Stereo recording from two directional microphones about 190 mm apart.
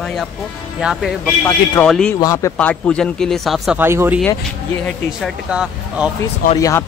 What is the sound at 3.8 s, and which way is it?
Speech, 10° right (ahead or behind).